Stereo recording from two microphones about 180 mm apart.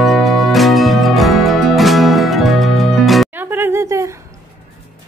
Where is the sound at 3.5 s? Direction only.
15° right (ahead or behind).